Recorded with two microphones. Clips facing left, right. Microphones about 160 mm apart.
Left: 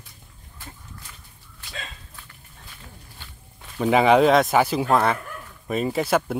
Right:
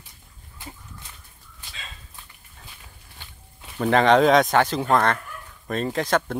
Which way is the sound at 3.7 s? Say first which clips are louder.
Left 1 dB; 5° left (ahead or behind).